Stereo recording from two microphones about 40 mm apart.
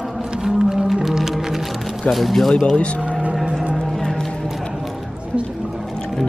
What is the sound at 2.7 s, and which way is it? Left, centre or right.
Speech, left.